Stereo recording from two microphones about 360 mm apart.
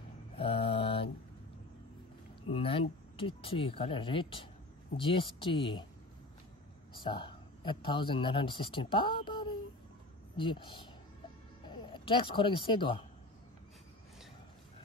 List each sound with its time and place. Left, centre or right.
0.4 s mantra: centre
2.4 s speech: centre
6.9 s speech: centre